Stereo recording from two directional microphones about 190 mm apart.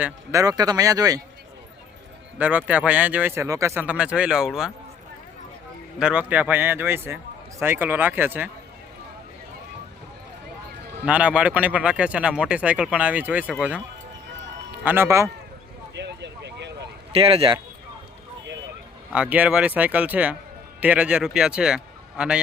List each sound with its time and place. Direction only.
0.0 s speech: 15° right (ahead or behind)
2.4 s speech: 10° right (ahead or behind)
6.0 s speech: 5° right (ahead or behind)
11.0 s speech: 5° right (ahead or behind)
14.8 s speech: 10° right (ahead or behind)
16.0 s a sound: 65° right (ahead or behind)
17.1 s speech: 30° right (ahead or behind)
19.1 s speech: 5° right (ahead or behind)